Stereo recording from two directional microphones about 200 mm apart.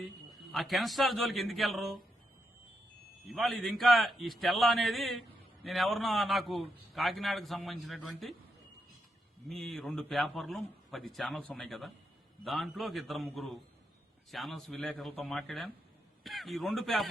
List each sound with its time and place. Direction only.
0.5 s a man's voice: centre (ahead or behind)
3.2 s a man's voice: centre (ahead or behind)
9.5 s a man's voice: centre (ahead or behind)